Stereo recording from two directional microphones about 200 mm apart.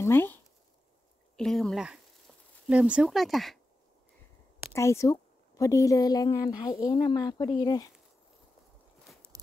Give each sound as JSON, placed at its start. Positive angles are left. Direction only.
{"t": 0.0, "sound": "speech", "side_deg": 10}
{"t": 4.7, "sound": "a woman's voice", "side_deg": 15}
{"t": 9.1, "sound": "walk", "side_deg": 0}